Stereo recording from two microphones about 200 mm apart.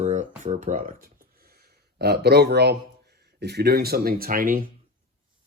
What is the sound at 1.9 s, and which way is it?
A man's voice, 55° right (ahead or behind).